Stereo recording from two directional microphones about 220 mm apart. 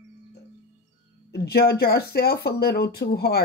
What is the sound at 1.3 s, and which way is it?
Speech, 50° left (ahead or behind).